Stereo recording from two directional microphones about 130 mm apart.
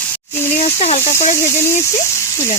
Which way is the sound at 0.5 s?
60° left (ahead or behind).